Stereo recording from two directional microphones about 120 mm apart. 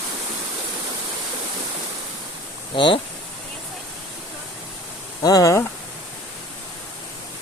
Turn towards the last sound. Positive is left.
turn(degrees=25)  # may be behind; listen again after turning